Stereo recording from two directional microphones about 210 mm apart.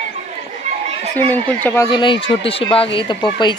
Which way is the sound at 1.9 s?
25° left (ahead or behind).